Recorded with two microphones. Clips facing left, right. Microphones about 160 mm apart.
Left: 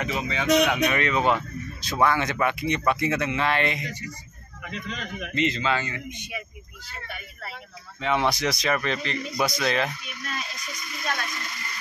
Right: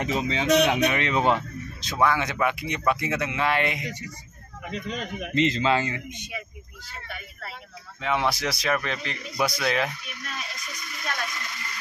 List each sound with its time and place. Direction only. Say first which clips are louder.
0.0 s a man's voice: right 2 dB; 25° right (ahead or behind)
2.0 s speech: left 1 dB; 5° right (ahead or behind)
4.6 s a man's voice: right 3 dB; 40° right (ahead or behind)
8.0 s speech: left 2 dB; 5° right (ahead or behind)